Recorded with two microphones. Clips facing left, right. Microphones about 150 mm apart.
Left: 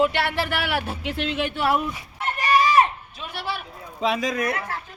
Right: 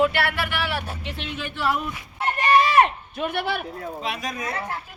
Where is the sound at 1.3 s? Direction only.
90° left.